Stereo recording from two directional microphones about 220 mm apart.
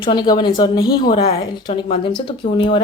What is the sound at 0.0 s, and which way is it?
A woman's voice, 20° left (ahead or behind).